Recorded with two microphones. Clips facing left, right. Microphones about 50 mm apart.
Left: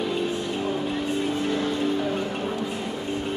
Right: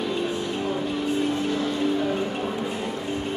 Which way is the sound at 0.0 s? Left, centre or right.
Centre.